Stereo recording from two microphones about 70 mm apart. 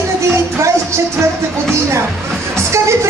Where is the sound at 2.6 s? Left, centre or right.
Right.